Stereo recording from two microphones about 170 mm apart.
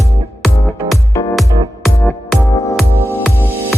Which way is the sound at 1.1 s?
20° left (ahead or behind).